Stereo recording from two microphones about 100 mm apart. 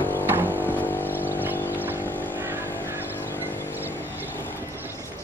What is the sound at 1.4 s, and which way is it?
Boat, 20° right (ahead or behind).